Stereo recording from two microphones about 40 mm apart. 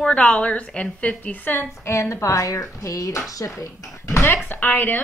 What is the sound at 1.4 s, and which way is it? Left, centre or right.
Speech, left.